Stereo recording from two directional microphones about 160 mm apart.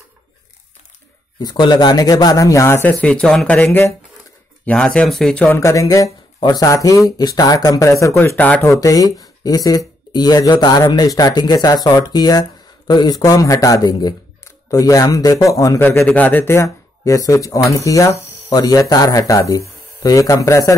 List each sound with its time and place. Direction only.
1.4 s speech: 25° left (ahead or behind); by 5.6 s 5° left (ahead or behind)
5.6 s speech: 20° left (ahead or behind)
8.7 s speech: 20° left (ahead or behind)